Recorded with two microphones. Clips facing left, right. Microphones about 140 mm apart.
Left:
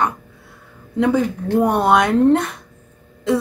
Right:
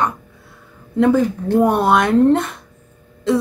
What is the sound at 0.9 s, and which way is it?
Speech, centre (ahead or behind).